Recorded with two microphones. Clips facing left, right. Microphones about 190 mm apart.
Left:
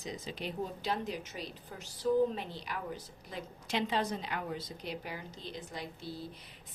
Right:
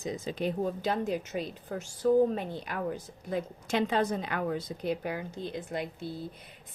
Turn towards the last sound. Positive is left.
turn(degrees=-55)  # may be behind; listen again after turning